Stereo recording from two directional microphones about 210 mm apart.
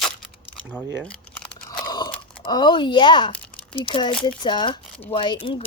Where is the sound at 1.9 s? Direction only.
20° left (ahead or behind).